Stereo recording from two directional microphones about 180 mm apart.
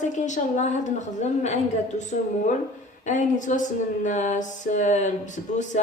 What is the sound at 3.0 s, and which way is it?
A woman's voice, 45° left (ahead or behind).